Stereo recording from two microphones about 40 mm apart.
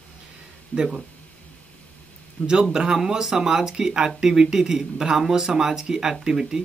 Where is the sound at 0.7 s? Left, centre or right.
Centre.